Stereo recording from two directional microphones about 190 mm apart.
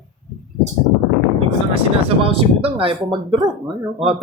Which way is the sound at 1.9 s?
30° right (ahead or behind).